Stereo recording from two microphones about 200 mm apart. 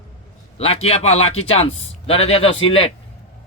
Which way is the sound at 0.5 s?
30° left (ahead or behind).